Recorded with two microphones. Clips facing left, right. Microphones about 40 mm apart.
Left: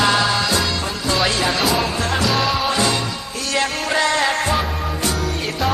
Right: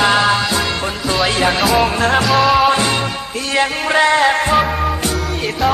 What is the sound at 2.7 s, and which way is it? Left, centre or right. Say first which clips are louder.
Music: right 4 dB; right.